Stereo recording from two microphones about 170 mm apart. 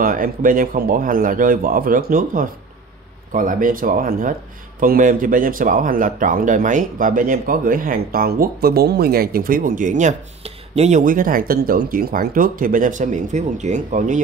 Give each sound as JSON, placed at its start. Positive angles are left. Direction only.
{"t": 0.0, "sound": "speech", "side_deg": -55}